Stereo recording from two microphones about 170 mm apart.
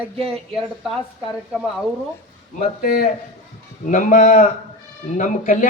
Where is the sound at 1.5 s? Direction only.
5° right (ahead or behind).